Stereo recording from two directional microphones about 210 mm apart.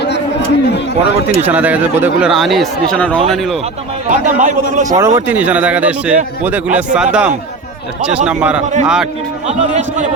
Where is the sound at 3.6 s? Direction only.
40° right (ahead or behind).